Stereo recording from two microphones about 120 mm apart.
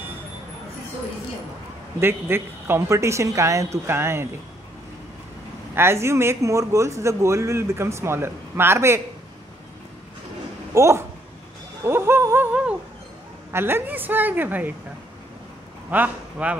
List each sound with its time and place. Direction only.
2.0 s speech: 20° right (ahead or behind)
5.8 s speech: 20° right (ahead or behind)
10.7 s a woman's voice: 25° right (ahead or behind)
15.9 s a woman's voice: 15° right (ahead or behind)